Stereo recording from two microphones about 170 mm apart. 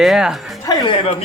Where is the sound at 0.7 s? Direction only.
25° left (ahead or behind).